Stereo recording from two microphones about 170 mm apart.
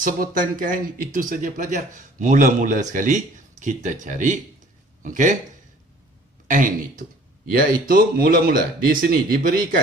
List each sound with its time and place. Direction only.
0.0 s speech: 55° right (ahead or behind)
6.4 s speech: 50° right (ahead or behind)